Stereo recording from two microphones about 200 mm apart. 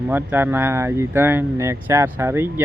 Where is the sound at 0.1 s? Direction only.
10° right (ahead or behind).